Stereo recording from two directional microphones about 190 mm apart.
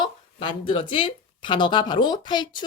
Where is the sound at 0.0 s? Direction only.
25° left (ahead or behind).